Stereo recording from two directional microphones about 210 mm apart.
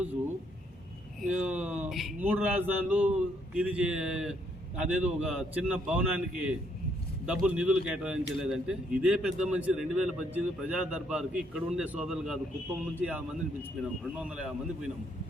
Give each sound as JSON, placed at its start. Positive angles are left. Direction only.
{"t": 1.2, "sound": "a man's voice", "side_deg": -5}